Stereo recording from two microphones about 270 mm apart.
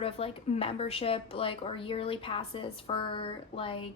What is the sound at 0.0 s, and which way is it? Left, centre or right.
A woman's voice, left.